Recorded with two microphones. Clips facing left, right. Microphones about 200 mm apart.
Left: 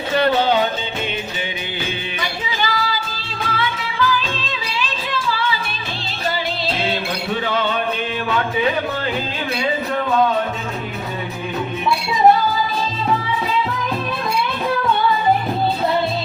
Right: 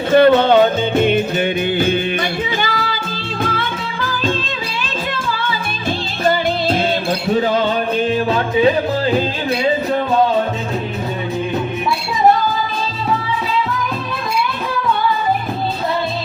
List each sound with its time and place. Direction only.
0.1 s music: 50° right (ahead or behind)
7.3 s music: 40° right (ahead or behind)